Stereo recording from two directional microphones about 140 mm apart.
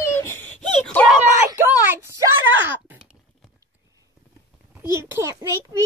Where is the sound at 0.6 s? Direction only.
5° left (ahead or behind).